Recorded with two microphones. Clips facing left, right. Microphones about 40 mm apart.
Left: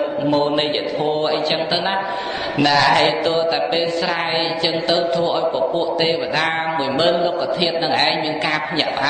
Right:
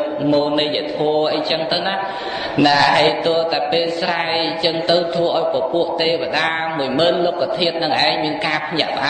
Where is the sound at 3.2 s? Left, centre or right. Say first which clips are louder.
Right 1 dB; centre.